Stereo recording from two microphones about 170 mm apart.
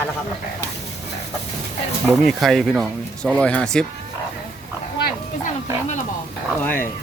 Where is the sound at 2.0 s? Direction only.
Centre (ahead or behind).